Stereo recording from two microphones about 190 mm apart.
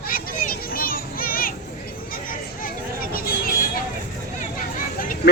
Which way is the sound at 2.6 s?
50° left (ahead or behind).